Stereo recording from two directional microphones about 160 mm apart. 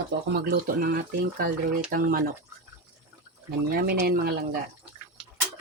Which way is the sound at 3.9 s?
70° right (ahead or behind).